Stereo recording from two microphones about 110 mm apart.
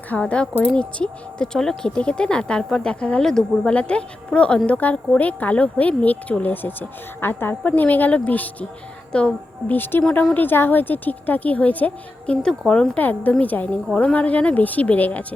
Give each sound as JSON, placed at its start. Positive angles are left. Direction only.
{"t": 0.1, "sound": "speech", "side_deg": 10}